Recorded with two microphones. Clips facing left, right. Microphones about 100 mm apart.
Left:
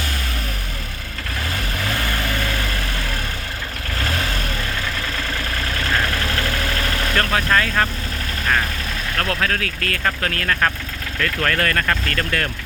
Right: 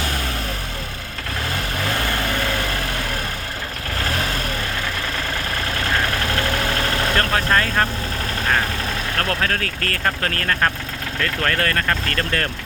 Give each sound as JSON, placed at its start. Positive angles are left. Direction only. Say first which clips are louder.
{"t": 7.2, "sound": "vehicle", "louder": "left 2 dB", "side_deg": -30}
{"t": 9.1, "sound": "speech", "louder": "left 1 dB", "side_deg": -35}
{"t": 11.2, "sound": "speech", "louder": "left 1 dB", "side_deg": -25}